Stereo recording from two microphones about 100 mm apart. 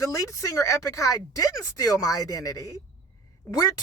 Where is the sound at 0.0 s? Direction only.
35° left (ahead or behind).